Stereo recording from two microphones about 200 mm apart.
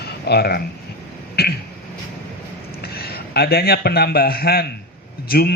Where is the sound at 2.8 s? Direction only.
50° left (ahead or behind).